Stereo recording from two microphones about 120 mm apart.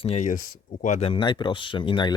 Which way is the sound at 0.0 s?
65° left (ahead or behind).